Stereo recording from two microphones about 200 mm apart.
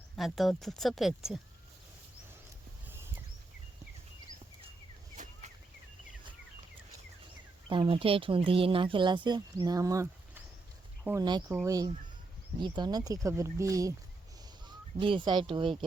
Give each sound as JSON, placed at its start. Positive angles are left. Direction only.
{"t": 0.2, "sound": "speech", "side_deg": 0}
{"t": 5.1, "sound": "a sound", "side_deg": -40}
{"t": 7.7, "sound": "speech", "side_deg": -25}
{"t": 14.9, "sound": "speech", "side_deg": -25}